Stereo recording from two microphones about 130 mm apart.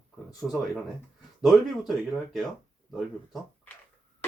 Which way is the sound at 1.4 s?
Centre (ahead or behind).